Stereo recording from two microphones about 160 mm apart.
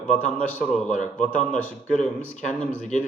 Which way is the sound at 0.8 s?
50° left (ahead or behind).